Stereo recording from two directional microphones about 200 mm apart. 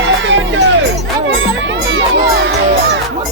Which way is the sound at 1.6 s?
70° right (ahead or behind).